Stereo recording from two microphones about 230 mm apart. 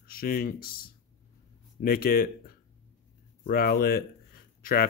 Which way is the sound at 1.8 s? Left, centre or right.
Left.